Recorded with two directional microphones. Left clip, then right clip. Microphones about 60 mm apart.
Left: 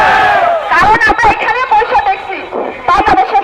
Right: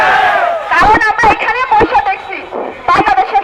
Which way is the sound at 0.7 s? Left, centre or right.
Right.